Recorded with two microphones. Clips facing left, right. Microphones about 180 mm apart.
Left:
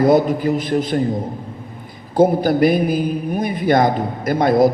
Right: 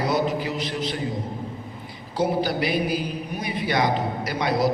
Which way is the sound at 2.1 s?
50° left (ahead or behind).